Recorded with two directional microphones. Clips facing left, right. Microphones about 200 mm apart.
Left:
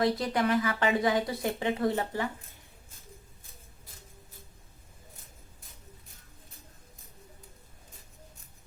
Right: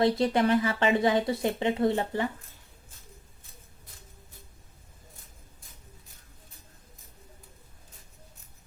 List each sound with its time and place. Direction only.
0.0 s speech: 25° right (ahead or behind)